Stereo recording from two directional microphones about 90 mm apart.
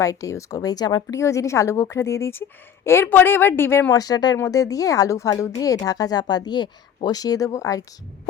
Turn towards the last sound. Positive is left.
turn(degrees=40)  # may be behind; listen again after turning